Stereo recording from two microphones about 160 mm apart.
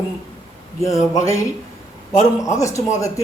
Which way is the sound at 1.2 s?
20° left (ahead or behind).